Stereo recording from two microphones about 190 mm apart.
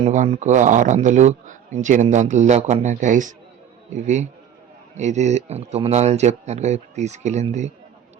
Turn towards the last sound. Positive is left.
turn(degrees=-35)  # may be behind; listen again after turning